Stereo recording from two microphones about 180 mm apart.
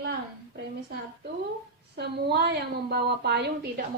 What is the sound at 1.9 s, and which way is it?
A woman's voice, 65° right (ahead or behind).